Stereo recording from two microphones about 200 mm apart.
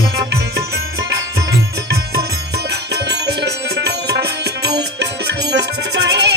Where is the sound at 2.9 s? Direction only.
55° right (ahead or behind).